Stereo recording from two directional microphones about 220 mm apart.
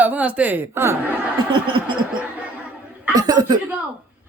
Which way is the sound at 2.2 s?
5° right (ahead or behind).